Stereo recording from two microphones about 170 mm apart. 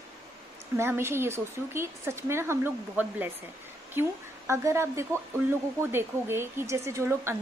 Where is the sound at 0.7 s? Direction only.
15° right (ahead or behind).